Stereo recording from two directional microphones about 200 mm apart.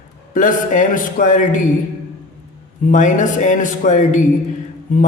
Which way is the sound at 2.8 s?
40° left (ahead or behind).